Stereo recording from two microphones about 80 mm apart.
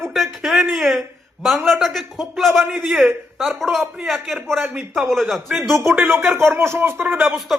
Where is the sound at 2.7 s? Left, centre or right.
Centre.